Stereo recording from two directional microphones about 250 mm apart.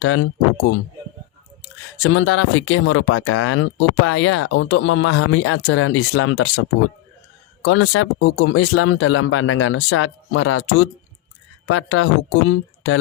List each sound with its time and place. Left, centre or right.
0.0 s speech: left
2.0 s speech: left